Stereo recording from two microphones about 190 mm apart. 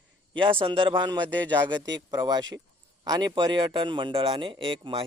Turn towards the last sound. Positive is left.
turn(degrees=-25)  # may be behind; listen again after turning